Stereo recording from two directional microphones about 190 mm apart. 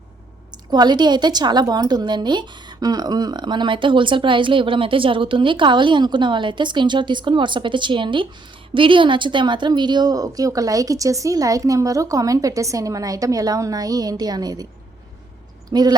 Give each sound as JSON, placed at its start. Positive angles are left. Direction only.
{"t": 0.5, "sound": "a woman's voice", "side_deg": -20}
{"t": 15.7, "sound": "a woman's voice", "side_deg": -20}